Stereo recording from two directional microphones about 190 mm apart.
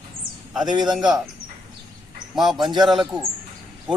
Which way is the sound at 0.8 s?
Centre (ahead or behind).